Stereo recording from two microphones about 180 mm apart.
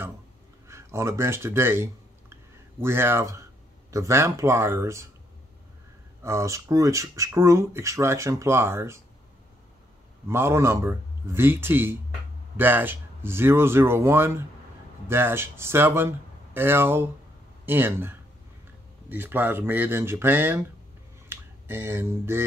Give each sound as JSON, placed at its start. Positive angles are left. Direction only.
{"t": 0.7, "sound": "speech", "side_deg": -15}
{"t": 6.2, "sound": "speech", "side_deg": -15}
{"t": 10.2, "sound": "speech", "side_deg": -15}